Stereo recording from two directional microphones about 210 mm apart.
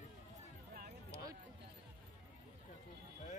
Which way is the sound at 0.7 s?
45° right (ahead or behind).